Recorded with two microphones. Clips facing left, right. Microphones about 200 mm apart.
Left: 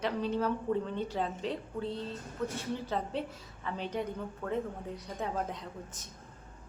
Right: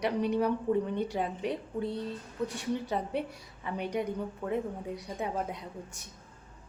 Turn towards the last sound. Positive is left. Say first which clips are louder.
# right 1 dB
turn(degrees=-10)  # may be behind; listen again after turning